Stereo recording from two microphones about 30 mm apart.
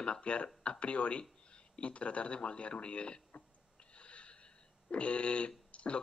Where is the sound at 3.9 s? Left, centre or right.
Left.